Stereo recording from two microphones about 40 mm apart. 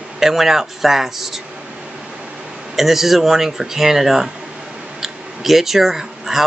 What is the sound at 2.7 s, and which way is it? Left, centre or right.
Speech, centre.